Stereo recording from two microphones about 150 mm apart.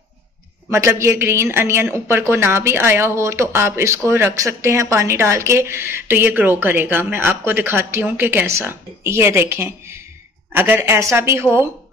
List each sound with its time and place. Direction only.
0.7 s speech: 20° right (ahead or behind)